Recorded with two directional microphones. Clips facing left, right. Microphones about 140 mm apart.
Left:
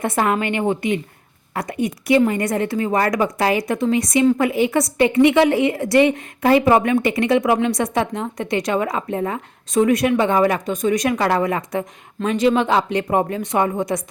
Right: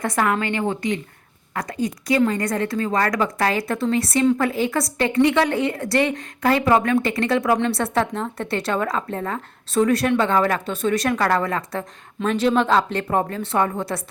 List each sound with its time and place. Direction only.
0.0 s a woman's voice: 25° left (ahead or behind)